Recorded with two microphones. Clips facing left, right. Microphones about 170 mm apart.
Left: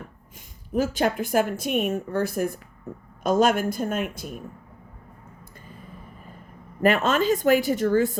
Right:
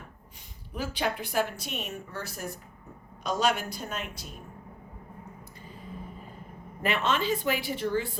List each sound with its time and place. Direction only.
0.3 s speech: 45° left (ahead or behind)
6.8 s speech: 45° left (ahead or behind)